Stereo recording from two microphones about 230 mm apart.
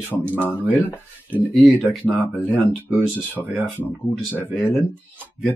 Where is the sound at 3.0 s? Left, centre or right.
Centre.